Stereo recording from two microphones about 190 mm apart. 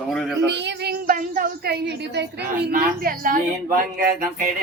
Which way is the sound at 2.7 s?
50° right (ahead or behind).